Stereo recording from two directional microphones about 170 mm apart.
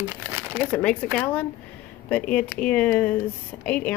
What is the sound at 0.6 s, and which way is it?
Speech, 10° left (ahead or behind).